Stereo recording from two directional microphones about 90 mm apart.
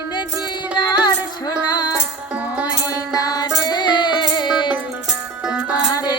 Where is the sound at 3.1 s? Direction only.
45° left (ahead or behind).